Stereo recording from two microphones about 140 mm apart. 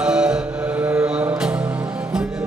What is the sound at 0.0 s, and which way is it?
Music, 5° right (ahead or behind).